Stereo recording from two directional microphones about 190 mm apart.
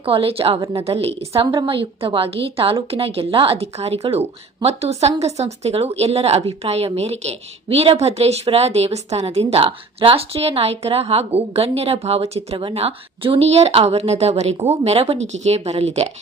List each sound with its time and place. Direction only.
0.0 s a woman's voice: 30° right (ahead or behind)